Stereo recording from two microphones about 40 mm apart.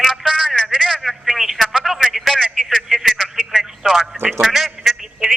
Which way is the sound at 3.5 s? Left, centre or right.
Centre.